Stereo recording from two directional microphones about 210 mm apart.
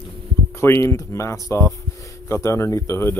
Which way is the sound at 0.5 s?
10° left (ahead or behind).